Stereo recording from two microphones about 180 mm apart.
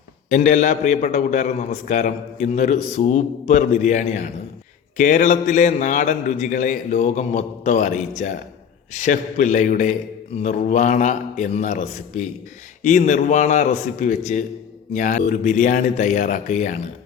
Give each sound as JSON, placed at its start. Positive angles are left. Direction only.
{"t": 0.3, "sound": "a man's voice", "side_deg": 45}